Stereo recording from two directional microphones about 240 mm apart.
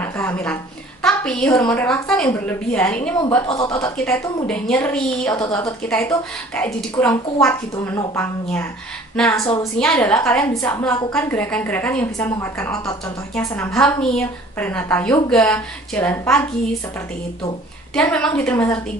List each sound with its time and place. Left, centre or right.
0.0 s a woman's voice: centre
1.0 s a sound: centre
1.7 s a woman's voice: centre
4.5 s a woman's voice: centre
17.9 s a woman's voice: centre